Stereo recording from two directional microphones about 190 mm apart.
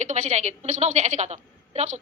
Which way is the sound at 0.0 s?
40° right (ahead or behind).